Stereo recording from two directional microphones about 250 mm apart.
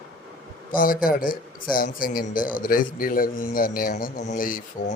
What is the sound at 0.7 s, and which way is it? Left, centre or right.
Speech, left.